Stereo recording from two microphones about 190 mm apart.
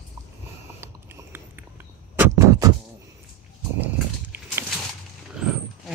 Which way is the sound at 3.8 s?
10° right (ahead or behind).